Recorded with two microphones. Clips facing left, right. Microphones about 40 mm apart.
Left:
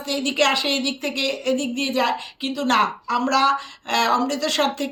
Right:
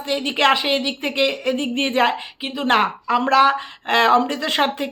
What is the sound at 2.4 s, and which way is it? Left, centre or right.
Speech, right.